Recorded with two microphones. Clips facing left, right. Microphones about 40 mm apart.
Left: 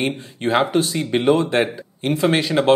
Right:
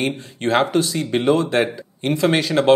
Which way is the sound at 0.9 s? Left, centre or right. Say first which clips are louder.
Left 2 dB; centre.